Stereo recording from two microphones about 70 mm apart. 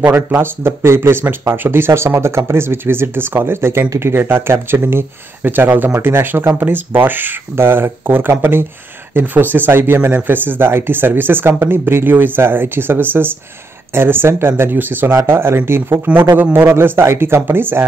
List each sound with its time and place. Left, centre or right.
0.0 s speech: right
9.1 s speech: right